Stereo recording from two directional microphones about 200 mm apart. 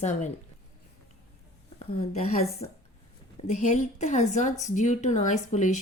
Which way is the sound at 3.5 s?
35° left (ahead or behind).